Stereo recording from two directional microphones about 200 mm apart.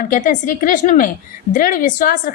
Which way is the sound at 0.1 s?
40° left (ahead or behind).